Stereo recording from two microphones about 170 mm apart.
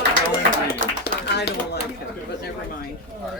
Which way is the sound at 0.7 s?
70° left (ahead or behind).